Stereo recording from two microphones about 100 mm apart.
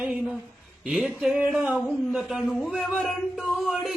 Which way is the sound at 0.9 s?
Centre (ahead or behind).